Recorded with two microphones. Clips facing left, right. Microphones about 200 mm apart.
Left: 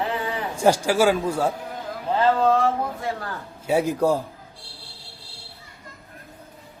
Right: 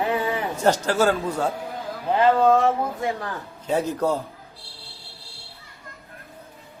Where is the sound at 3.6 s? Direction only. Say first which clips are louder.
Left 3 dB; 10° left (ahead or behind).